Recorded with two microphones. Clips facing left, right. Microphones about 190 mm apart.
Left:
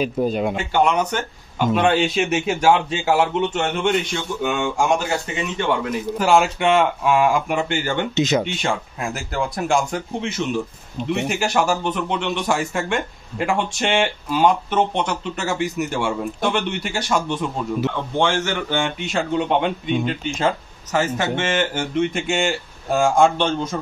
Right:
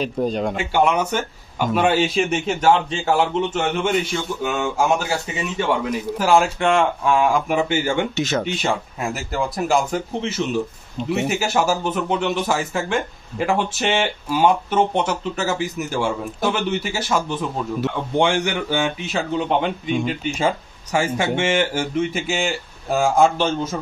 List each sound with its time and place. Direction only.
0.0 s speech: 5° left (ahead or behind)
0.6 s speech: 10° right (ahead or behind)
8.1 s speech: 15° left (ahead or behind)
8.5 s speech: centre (ahead or behind)
18.1 s speech: 15° right (ahead or behind)